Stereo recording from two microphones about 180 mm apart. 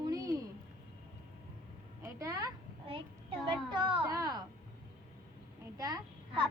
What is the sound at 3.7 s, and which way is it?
Speech, 25° right (ahead or behind).